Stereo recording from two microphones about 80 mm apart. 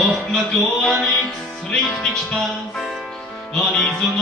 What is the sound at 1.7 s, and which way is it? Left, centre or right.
Music, centre.